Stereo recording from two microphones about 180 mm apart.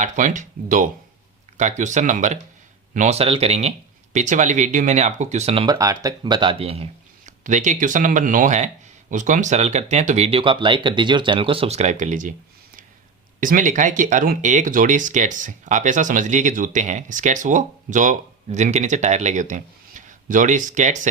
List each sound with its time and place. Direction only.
0.0 s speech: 45° right (ahead or behind)
7.3 s speech: 45° right (ahead or behind)
13.4 s speech: 45° right (ahead or behind)